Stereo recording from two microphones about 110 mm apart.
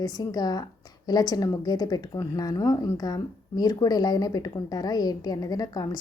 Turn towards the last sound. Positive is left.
turn(degrees=35)  # may be behind; listen again after turning